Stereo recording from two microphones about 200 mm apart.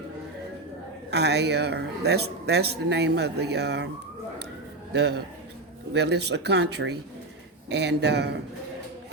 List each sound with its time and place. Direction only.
1.1 s a man's voice: 55° right (ahead or behind)
4.9 s a man's voice: 55° right (ahead or behind)